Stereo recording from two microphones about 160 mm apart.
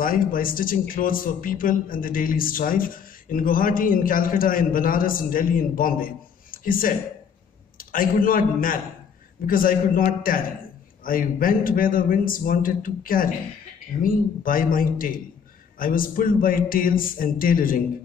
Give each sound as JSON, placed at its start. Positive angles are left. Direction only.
{"t": 0.0, "sound": "a man's voice", "side_deg": 60}